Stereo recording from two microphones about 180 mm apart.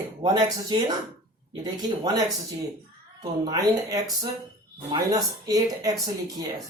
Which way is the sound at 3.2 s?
20° right (ahead or behind).